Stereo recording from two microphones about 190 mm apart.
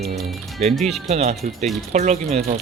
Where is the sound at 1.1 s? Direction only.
35° right (ahead or behind).